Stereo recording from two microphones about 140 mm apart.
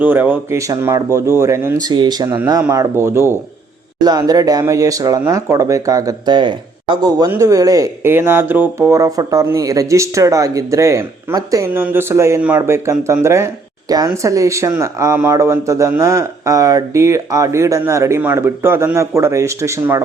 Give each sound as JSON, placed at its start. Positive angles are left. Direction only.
{"t": 0.0, "sound": "speech", "side_deg": -15}
{"t": 1.9, "sound": "speech", "side_deg": -30}
{"t": 2.6, "sound": "speech", "side_deg": -20}